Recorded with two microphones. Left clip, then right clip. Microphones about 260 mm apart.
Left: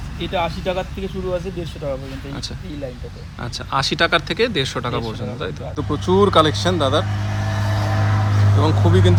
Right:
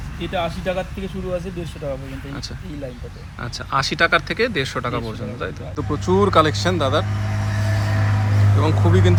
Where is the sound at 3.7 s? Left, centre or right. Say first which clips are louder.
Even; centre.